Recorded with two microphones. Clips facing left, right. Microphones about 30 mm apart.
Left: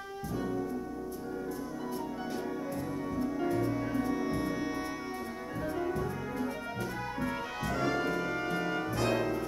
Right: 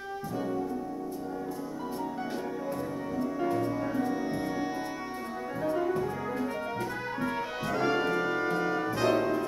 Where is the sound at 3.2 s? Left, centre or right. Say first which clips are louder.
Right 2 dB; centre.